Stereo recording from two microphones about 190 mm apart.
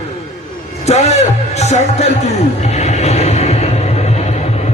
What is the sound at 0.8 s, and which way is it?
A man's voice, 35° left (ahead or behind).